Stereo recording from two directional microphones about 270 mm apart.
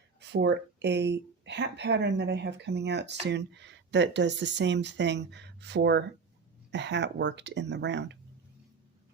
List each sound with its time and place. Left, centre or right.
0.2 s speech: right